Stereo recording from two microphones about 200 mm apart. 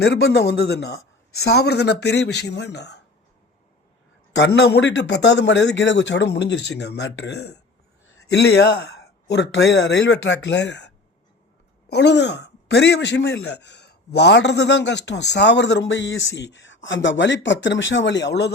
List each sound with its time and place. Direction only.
0.0 s a man's voice: 55° left (ahead or behind)
4.4 s a man's voice: 55° left (ahead or behind)